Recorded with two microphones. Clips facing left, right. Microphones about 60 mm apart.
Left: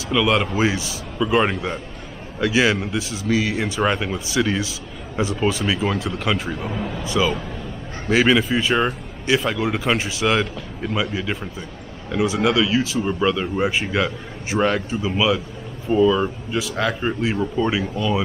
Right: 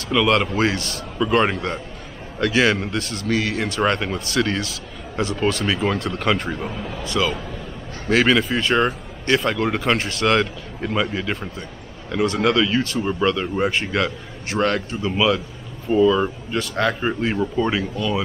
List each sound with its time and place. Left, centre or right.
0.1 s a man's voice: centre
7.0 s speech: centre
12.1 s speech: centre
15.9 s speech: centre